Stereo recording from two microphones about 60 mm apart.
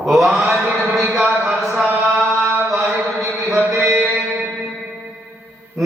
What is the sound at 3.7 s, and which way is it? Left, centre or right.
Mantra, right.